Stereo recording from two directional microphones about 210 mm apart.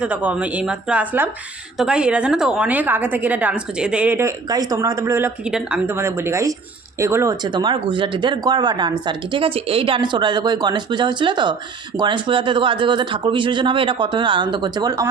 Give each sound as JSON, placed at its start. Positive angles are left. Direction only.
{"t": 0.0, "sound": "a woman's voice", "side_deg": -5}